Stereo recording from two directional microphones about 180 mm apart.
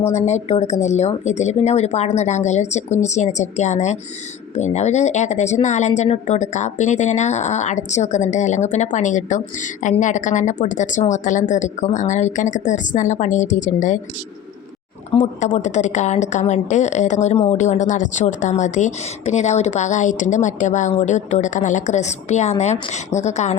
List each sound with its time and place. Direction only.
0.1 s a woman's voice: 40° left (ahead or behind)
15.1 s a woman's voice: 40° left (ahead or behind)